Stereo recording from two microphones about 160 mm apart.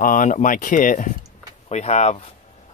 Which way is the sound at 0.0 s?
55° left (ahead or behind).